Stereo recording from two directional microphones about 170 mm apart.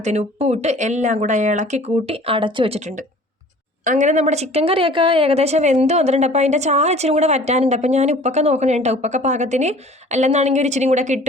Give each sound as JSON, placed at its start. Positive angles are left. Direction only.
{"t": 0.0, "sound": "a woman's voice", "side_deg": -40}